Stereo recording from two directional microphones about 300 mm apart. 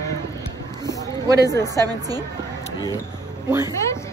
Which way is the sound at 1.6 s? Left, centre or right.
Centre.